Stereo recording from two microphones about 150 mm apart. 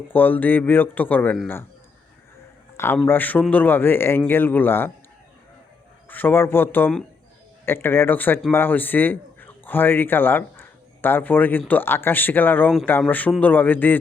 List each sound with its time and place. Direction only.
0.1 s speech: 10° left (ahead or behind)
2.7 s a man's voice: 15° left (ahead or behind)
6.1 s a man's voice: 15° left (ahead or behind)